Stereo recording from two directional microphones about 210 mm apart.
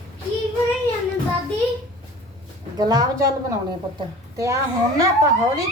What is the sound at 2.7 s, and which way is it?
Speech, 20° right (ahead or behind).